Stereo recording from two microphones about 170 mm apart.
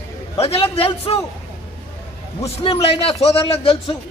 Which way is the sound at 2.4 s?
35° left (ahead or behind).